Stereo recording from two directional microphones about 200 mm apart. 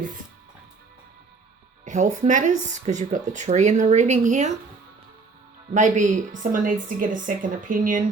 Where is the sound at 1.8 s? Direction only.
35° right (ahead or behind).